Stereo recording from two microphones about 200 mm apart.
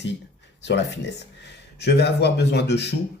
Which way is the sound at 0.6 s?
60° left (ahead or behind).